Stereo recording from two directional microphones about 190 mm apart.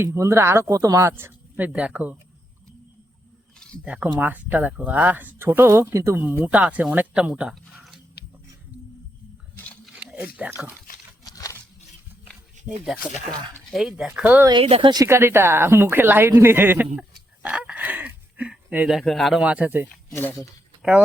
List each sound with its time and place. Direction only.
0.0 s speech: 15° right (ahead or behind)
3.8 s speech: 5° right (ahead or behind)
9.8 s a sound: 5° right (ahead or behind)
10.3 s speech: 10° right (ahead or behind)
11.2 s a sound: 20° left (ahead or behind)
12.8 s speech: centre (ahead or behind)
14.5 s speech: 30° right (ahead or behind); by 19.9 s 10° right (ahead or behind)
20.1 s speech: 10° left (ahead or behind)
20.3 s speech: centre (ahead or behind)